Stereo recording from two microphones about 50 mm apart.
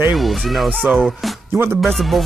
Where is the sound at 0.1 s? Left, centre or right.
Centre.